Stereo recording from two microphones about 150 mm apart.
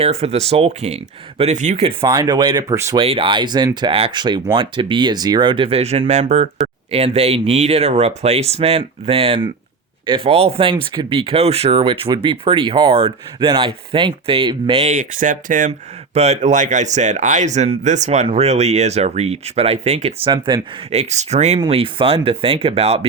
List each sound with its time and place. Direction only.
0.0 s speech: 45° right (ahead or behind)
2.0 s speech: 25° right (ahead or behind)
3.0 s speech: 35° right (ahead or behind)
14.9 s speech: 60° right (ahead or behind)
16.1 s speech: 45° right (ahead or behind)
20.9 s speech: 50° right (ahead or behind)